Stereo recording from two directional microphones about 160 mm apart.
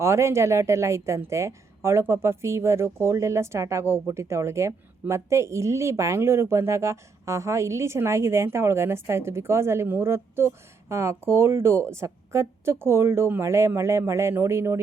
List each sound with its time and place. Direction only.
0.0 s speech: 15° right (ahead or behind)